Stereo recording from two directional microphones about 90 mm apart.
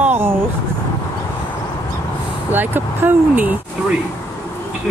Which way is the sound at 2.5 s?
20° right (ahead or behind).